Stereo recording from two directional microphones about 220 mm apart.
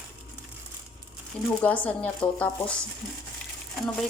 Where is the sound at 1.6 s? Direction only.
5° left (ahead or behind).